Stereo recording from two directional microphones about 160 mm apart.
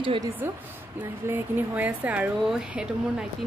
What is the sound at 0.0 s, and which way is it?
Speech, 30° right (ahead or behind).